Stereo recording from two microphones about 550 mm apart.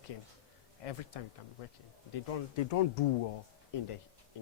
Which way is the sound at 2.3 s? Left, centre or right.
Left.